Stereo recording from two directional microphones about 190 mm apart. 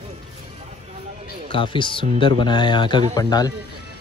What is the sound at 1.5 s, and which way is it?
Speech, 25° left (ahead or behind).